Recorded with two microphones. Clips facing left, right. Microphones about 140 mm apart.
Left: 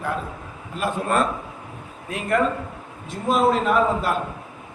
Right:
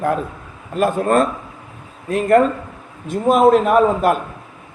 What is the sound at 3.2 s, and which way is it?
Speech, 50° right (ahead or behind).